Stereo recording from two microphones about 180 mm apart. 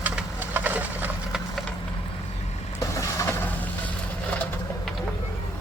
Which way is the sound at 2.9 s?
15° left (ahead or behind).